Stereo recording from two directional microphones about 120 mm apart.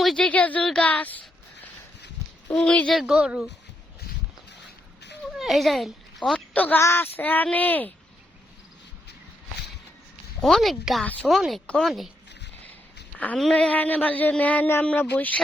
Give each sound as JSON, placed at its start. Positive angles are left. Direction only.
{"t": 0.0, "sound": "speech", "side_deg": 5}
{"t": 2.5, "sound": "speech", "side_deg": 10}
{"t": 5.4, "sound": "a woman's voice", "side_deg": 0}
{"t": 10.4, "sound": "speech", "side_deg": 0}
{"t": 11.0, "sound": "speech", "side_deg": 10}
{"t": 11.3, "sound": "speech", "side_deg": 0}
{"t": 13.1, "sound": "a woman's voice", "side_deg": 15}